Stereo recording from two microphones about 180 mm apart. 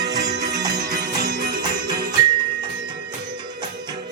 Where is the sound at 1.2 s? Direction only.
55° right (ahead or behind).